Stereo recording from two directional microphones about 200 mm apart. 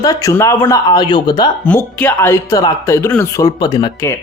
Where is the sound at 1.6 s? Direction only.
10° left (ahead or behind).